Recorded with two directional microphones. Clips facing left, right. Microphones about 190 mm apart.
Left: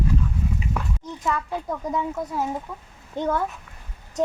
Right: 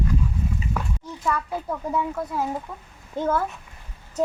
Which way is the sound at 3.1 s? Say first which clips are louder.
Right 1 dB; 5° right (ahead or behind).